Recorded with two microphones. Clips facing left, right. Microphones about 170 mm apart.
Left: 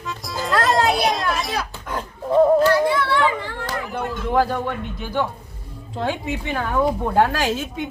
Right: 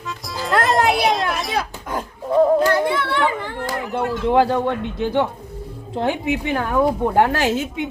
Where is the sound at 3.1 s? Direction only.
20° right (ahead or behind).